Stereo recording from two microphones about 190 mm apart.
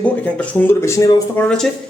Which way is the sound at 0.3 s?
15° left (ahead or behind).